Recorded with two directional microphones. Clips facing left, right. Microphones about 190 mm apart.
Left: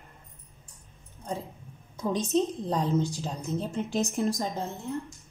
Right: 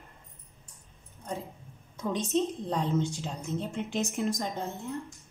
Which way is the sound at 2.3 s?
40° left (ahead or behind).